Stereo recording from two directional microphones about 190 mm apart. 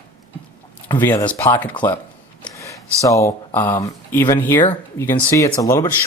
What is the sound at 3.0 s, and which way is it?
Speech, 15° left (ahead or behind).